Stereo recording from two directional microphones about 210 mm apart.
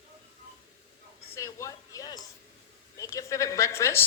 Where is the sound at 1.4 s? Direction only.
15° left (ahead or behind).